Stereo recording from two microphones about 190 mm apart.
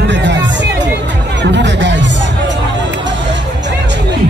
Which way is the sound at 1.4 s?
70° right (ahead or behind).